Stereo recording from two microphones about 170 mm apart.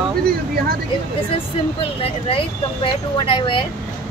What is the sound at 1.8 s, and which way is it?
Speech, 35° left (ahead or behind).